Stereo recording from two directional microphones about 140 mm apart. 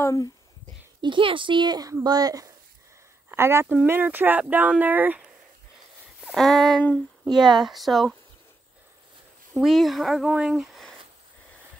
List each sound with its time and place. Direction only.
0.0 s speech: 25° left (ahead or behind)
1.0 s speech: 35° right (ahead or behind); by 5.3 s 10° right (ahead or behind)
6.2 s speech: centre (ahead or behind)
7.2 s speech: 30° right (ahead or behind)
7.5 s speech: centre (ahead or behind)
9.6 s speech: centre (ahead or behind)